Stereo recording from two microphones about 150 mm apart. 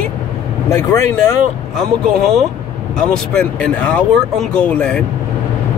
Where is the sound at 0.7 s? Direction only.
20° left (ahead or behind).